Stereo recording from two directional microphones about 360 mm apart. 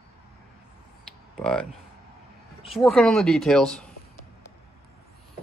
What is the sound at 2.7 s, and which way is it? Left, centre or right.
Speech, centre.